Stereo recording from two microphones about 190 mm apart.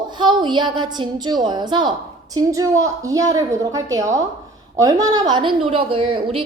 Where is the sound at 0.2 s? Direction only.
25° right (ahead or behind).